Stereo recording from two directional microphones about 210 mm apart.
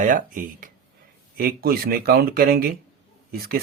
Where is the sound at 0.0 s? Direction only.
40° right (ahead or behind).